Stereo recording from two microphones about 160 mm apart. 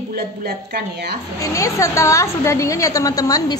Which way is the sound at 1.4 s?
20° left (ahead or behind).